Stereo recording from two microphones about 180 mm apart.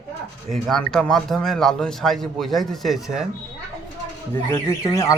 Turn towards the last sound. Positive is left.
turn(degrees=15)  # may be behind; listen again after turning